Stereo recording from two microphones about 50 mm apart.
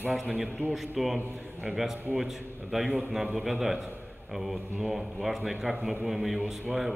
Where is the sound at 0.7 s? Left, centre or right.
Centre.